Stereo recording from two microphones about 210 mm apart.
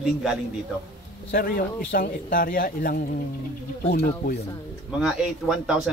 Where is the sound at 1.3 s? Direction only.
45° left (ahead or behind).